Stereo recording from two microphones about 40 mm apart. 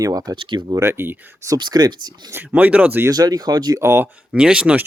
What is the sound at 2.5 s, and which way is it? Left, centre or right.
Chicken, right.